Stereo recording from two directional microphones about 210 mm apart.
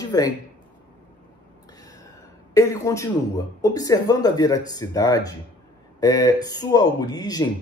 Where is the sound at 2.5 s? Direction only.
15° left (ahead or behind).